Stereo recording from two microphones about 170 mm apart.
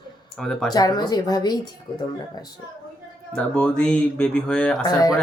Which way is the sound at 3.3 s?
5° left (ahead or behind).